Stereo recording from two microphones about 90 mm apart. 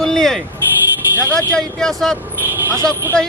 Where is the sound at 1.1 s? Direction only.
30° right (ahead or behind).